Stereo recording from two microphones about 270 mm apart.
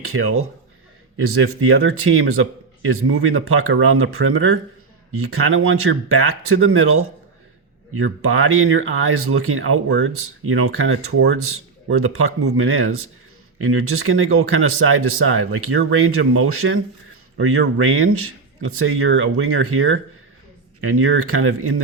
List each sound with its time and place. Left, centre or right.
0.1 s speech: right